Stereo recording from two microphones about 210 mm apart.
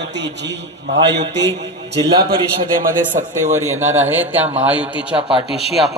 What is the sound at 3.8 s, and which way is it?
Speech, 35° right (ahead or behind).